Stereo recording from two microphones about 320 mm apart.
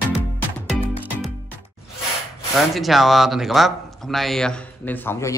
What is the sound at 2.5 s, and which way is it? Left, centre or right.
A man's voice, centre.